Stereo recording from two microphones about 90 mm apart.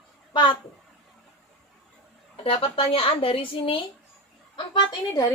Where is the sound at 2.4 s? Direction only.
75° left (ahead or behind).